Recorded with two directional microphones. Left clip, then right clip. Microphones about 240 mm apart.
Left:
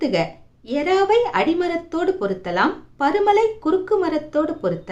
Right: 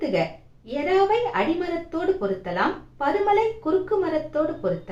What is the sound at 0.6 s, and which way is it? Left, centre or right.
A woman's voice, left.